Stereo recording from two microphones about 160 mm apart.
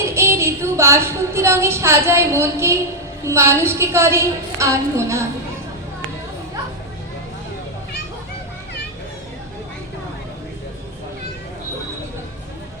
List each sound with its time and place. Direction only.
0.0 s a woman's voice: 15° right (ahead or behind)